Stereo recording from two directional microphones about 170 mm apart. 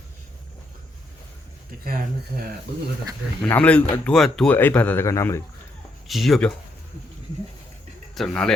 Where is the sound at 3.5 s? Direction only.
10° left (ahead or behind).